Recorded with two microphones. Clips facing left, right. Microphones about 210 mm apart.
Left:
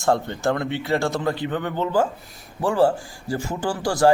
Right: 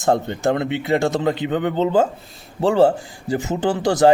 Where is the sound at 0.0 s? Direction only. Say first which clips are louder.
Right 3 dB; 20° right (ahead or behind).